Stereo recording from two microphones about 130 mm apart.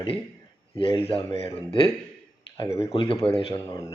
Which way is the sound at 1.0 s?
45° left (ahead or behind).